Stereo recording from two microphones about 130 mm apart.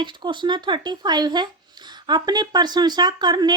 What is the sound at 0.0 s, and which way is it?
A woman's voice, 35° right (ahead or behind).